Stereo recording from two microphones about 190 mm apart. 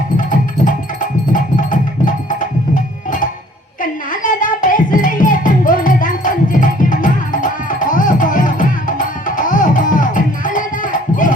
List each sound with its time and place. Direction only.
1.3 s music: 45° left (ahead or behind)
4.1 s music: 45° left (ahead or behind)